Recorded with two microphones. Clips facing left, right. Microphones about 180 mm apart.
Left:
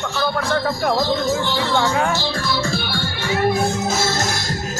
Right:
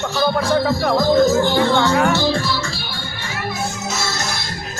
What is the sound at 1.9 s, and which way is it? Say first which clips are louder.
Speech: right 4 dB; 75° right (ahead or behind).